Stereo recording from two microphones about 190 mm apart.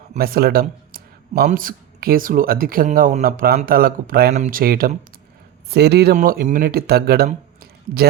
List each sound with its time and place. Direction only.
0.2 s speech: 55° right (ahead or behind)